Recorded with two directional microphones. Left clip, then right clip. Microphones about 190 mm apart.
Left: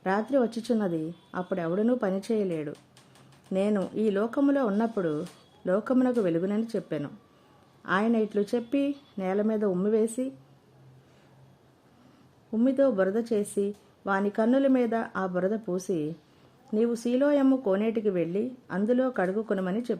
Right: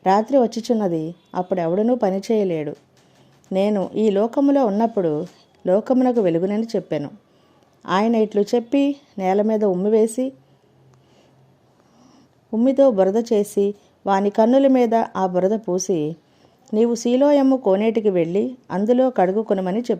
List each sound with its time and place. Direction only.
0.0 s a woman's voice: 15° right (ahead or behind)
12.5 s a woman's voice: 15° right (ahead or behind)